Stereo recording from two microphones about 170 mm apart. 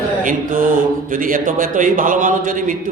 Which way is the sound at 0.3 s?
50° right (ahead or behind).